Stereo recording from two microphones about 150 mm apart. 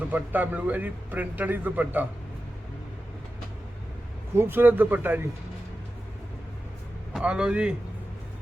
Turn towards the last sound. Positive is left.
turn(degrees=-5)  # may be behind; listen again after turning